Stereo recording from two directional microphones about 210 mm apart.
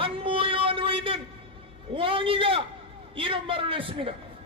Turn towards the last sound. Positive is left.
turn(degrees=-25)  # may be behind; listen again after turning